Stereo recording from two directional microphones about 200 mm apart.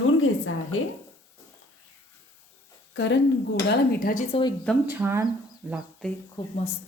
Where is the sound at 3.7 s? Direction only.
45° left (ahead or behind).